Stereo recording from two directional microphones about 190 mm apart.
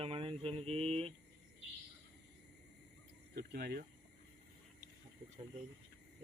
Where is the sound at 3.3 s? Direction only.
55° right (ahead or behind).